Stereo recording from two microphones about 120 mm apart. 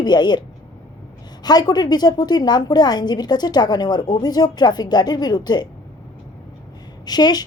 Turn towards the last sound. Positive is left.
turn(degrees=35)  # may be behind; listen again after turning